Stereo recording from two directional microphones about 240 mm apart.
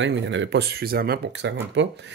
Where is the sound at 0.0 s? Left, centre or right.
Right.